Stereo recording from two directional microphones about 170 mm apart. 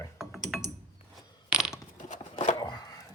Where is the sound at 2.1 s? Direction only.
40° left (ahead or behind).